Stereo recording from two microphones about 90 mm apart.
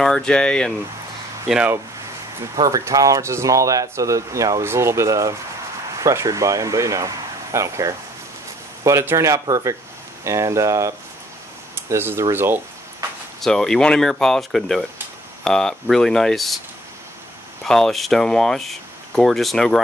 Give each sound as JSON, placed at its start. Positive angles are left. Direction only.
{"t": 0.0, "sound": "speech", "side_deg": 10}
{"t": 1.5, "sound": "speech", "side_deg": -5}
{"t": 2.5, "sound": "speech", "side_deg": -50}
{"t": 9.1, "sound": "speech", "side_deg": -35}
{"t": 11.7, "sound": "speech", "side_deg": -25}
{"t": 13.4, "sound": "speech", "side_deg": 5}
{"t": 17.6, "sound": "speech", "side_deg": 5}